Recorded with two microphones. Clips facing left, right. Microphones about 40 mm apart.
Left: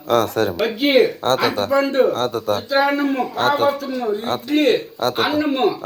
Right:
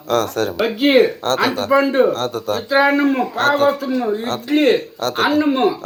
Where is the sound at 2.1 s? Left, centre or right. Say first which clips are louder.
Left 1 dB; centre.